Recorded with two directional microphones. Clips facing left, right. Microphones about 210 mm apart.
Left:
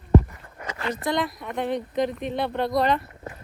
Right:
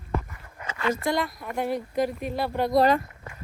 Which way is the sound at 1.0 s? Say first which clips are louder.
Left 1 dB; centre (ahead or behind).